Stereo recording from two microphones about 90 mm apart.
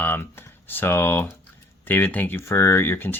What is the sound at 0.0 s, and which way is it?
Speech, 25° left (ahead or behind).